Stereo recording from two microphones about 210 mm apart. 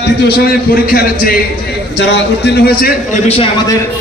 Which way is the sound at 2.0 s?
55° left (ahead or behind).